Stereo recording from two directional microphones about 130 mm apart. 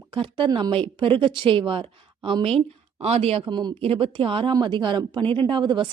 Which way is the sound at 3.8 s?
45° right (ahead or behind).